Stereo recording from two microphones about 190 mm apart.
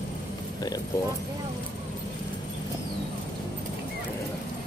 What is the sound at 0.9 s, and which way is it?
Speech, 15° left (ahead or behind).